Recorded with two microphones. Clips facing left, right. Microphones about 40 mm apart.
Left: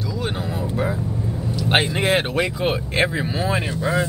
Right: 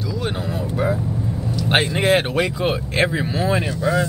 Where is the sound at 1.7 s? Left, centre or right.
Centre.